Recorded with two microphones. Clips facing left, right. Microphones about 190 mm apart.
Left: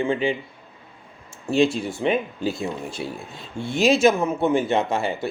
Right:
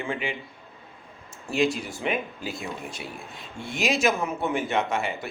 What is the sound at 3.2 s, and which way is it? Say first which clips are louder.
Speech: left 6 dB; centre (ahead or behind).